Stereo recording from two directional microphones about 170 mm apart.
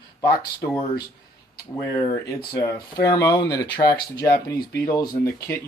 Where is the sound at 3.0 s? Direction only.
20° left (ahead or behind).